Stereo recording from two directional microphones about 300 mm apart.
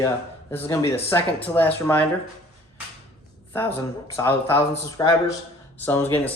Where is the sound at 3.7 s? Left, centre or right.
Centre.